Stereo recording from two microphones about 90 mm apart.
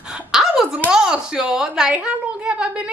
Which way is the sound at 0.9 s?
10° right (ahead or behind).